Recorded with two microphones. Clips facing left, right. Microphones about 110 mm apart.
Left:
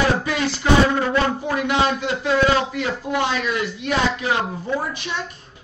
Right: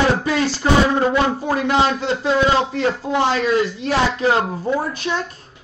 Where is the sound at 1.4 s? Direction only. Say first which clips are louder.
Right 3 dB; 35° right (ahead or behind).